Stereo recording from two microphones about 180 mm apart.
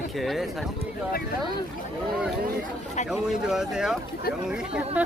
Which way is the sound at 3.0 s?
5° right (ahead or behind).